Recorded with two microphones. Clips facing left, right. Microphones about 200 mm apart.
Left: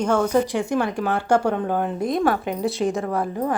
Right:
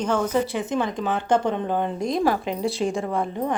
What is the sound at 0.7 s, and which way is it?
Speech, 20° right (ahead or behind).